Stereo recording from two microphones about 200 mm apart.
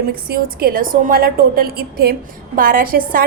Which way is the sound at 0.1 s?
50° right (ahead or behind).